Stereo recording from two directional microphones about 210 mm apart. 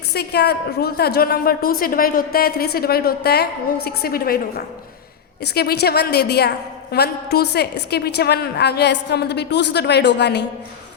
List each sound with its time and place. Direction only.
0.1 s a woman's voice: 50° left (ahead or behind)